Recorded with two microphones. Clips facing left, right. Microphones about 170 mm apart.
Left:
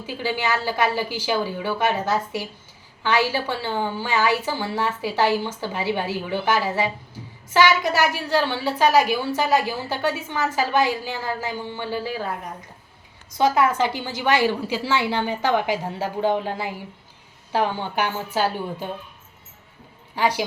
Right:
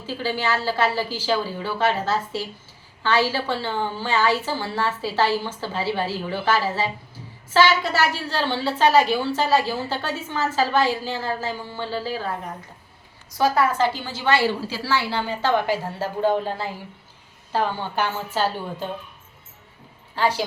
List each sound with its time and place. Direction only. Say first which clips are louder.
0.0 s a woman's voice: even; 15° left (ahead or behind)
13.3 s a woman's voice: left 1 dB; 20° left (ahead or behind)
20.1 s a woman's voice: even; 15° left (ahead or behind)